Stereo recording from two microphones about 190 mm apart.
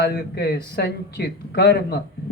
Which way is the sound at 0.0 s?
55° left (ahead or behind).